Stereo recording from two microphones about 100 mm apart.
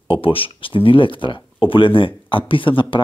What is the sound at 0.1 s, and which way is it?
Speech, 65° left (ahead or behind).